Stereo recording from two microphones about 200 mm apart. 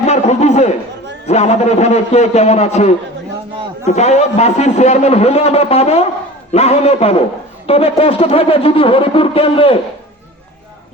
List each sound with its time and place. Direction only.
0.0 s a man's voice: 35° left (ahead or behind)